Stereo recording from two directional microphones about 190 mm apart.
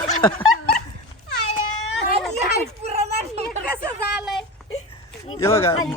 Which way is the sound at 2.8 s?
35° right (ahead or behind).